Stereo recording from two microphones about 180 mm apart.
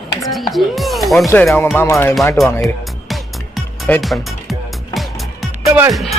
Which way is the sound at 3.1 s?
Centre (ahead or behind).